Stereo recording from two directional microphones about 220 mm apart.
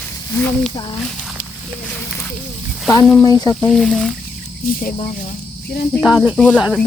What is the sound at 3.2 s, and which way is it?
Speech, 15° left (ahead or behind).